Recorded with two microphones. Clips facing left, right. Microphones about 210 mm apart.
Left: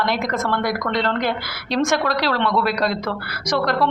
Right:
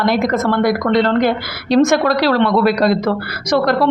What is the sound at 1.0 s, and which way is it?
Speech, 45° right (ahead or behind).